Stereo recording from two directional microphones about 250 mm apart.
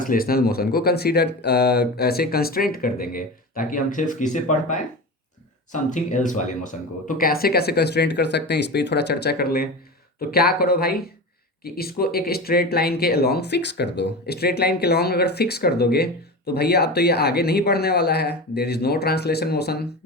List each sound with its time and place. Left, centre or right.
0.0 s speech: left